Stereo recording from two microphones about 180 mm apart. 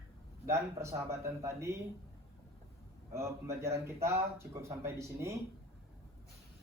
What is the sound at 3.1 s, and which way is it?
Speech, 15° right (ahead or behind).